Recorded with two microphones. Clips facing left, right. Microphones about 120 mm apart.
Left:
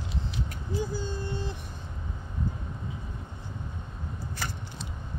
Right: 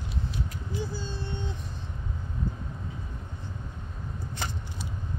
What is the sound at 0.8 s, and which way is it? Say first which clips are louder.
Vehicle: left 3 dB; 15° left (ahead or behind).